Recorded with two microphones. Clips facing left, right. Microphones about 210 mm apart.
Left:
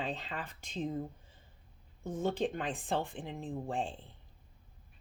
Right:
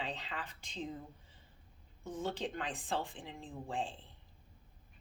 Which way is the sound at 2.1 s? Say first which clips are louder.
Left 6 dB; 50° left (ahead or behind).